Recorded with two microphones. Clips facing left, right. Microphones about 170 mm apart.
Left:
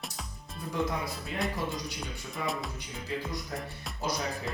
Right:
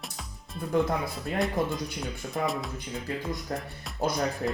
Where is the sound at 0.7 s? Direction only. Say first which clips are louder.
Right 6 dB; 50° right (ahead or behind).